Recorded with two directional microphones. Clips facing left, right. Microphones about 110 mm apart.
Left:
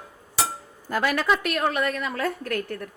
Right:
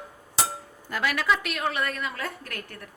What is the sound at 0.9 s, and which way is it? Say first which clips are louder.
A woman's voice: left 3 dB; 40° left (ahead or behind).